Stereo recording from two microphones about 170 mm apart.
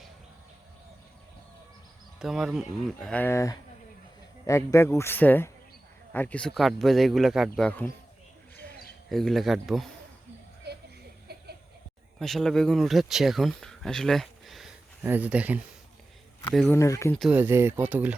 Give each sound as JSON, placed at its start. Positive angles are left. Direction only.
{"t": 2.1, "sound": "speech", "side_deg": -5}
{"t": 9.0, "sound": "speech", "side_deg": 0}
{"t": 11.3, "sound": "chuckle", "side_deg": -70}
{"t": 12.2, "sound": "speech", "side_deg": 0}
{"t": 16.6, "sound": "speech", "side_deg": 15}
{"t": 17.2, "sound": "speech", "side_deg": -5}